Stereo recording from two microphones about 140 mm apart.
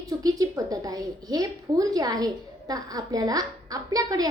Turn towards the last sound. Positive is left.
turn(degrees=-25)  # may be behind; listen again after turning